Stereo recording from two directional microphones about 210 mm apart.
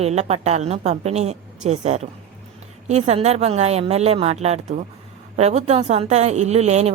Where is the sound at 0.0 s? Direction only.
30° right (ahead or behind).